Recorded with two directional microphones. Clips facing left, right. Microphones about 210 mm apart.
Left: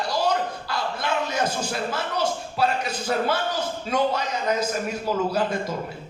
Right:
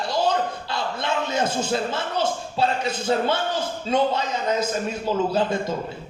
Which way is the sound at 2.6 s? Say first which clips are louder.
Right 1 dB; 25° right (ahead or behind).